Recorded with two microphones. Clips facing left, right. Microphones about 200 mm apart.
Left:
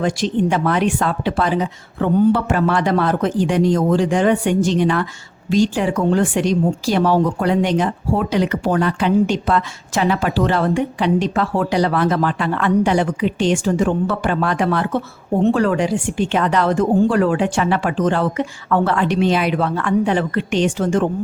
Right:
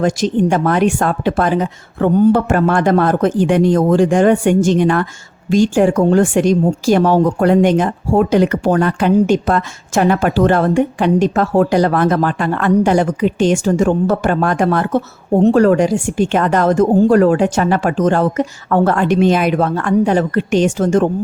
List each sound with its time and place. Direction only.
0.0 s speech: 45° right (ahead or behind)